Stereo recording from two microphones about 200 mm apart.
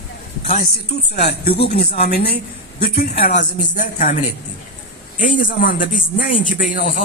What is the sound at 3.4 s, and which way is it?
Speech, 40° left (ahead or behind).